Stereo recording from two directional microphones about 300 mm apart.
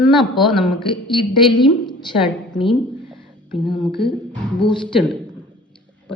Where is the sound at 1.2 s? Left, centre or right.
Centre.